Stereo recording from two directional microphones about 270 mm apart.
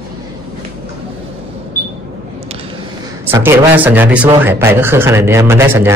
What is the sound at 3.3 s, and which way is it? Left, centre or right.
Speech, centre.